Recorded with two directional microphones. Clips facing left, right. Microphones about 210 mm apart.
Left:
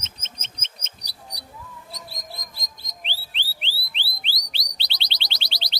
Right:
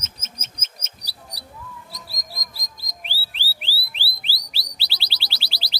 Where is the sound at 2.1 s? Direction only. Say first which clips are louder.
Left 1 dB; 35° right (ahead or behind).